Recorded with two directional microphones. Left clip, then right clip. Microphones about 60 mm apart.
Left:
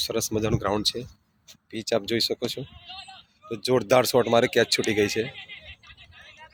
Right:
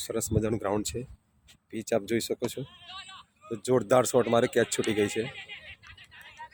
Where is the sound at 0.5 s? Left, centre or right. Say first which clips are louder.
Left 4 dB; right.